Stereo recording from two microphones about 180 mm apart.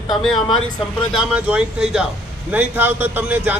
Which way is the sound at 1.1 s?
5° right (ahead or behind).